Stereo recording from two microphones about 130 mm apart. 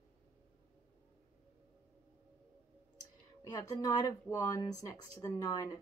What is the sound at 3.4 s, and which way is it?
Speech, 30° left (ahead or behind).